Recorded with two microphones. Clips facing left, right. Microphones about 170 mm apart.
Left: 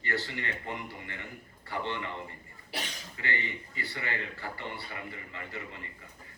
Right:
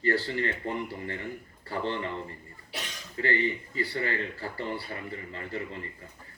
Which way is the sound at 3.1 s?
35° right (ahead or behind).